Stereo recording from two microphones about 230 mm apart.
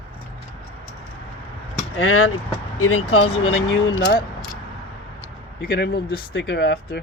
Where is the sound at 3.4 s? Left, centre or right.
Left.